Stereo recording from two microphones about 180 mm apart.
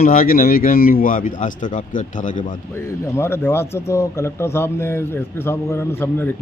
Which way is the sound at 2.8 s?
15° left (ahead or behind).